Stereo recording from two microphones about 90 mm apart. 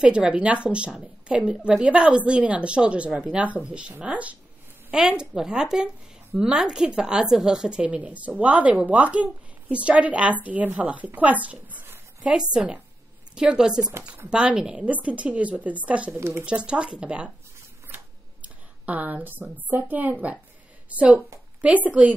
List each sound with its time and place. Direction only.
0.0 s a woman's voice: 10° right (ahead or behind)
16.2 s a woman's voice: 30° right (ahead or behind)
16.4 s a woman's voice: 10° right (ahead or behind)
17.8 s a sound: 20° right (ahead or behind)
19.5 s a woman's voice: 20° right (ahead or behind)